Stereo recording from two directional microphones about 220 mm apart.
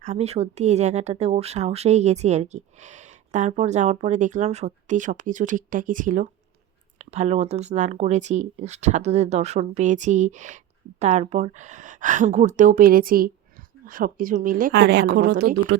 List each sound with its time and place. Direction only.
0.0 s speech: 30° right (ahead or behind); by 15.8 s 50° right (ahead or behind)